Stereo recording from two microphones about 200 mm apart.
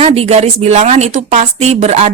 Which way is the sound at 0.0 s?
35° right (ahead or behind).